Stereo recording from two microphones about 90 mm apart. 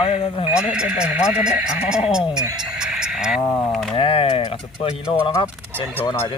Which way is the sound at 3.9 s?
80° left.